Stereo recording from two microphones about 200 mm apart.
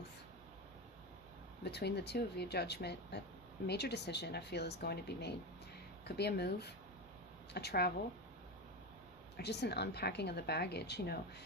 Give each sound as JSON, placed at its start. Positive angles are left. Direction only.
{"t": 1.6, "sound": "speech", "side_deg": 55}
{"t": 9.4, "sound": "speech", "side_deg": 55}